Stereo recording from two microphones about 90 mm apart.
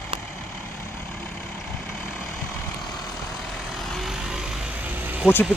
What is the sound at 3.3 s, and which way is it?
Vehicle, centre (ahead or behind).